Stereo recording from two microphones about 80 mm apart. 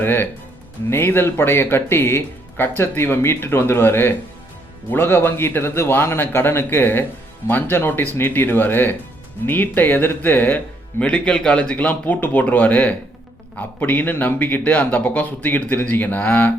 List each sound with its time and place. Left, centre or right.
0.0 s speech: left